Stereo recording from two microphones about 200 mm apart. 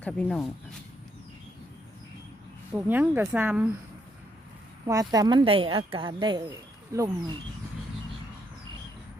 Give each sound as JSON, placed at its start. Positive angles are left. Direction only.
{"t": 0.0, "sound": "speech", "side_deg": 5}
{"t": 2.7, "sound": "speech", "side_deg": -10}
{"t": 4.9, "sound": "speech", "side_deg": -20}